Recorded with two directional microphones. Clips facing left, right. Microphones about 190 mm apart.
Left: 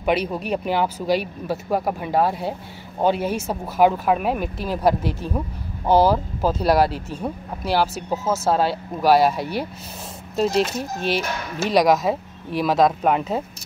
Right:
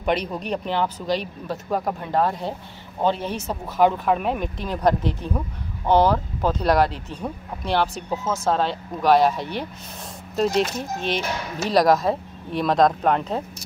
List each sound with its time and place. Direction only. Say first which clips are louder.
0.0 s speech: left 2 dB; 5° left (ahead or behind)